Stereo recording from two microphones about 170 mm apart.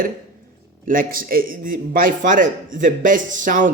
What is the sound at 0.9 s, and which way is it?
A man's voice, 55° right (ahead or behind).